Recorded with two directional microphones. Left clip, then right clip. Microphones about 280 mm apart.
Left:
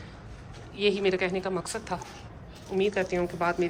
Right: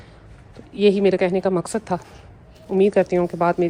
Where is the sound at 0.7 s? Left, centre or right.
Centre.